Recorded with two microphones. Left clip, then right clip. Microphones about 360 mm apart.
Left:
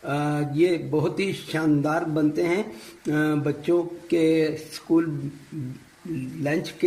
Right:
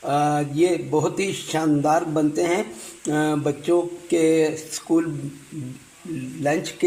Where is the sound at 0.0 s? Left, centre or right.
Right.